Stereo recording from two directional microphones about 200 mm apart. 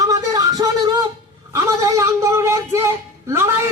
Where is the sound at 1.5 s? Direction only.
15° right (ahead or behind).